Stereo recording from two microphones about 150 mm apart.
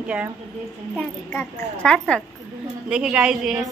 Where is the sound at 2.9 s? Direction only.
5° right (ahead or behind).